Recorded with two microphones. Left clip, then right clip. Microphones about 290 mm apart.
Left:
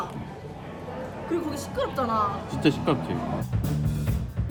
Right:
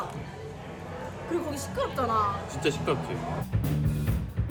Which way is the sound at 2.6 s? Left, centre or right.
Left.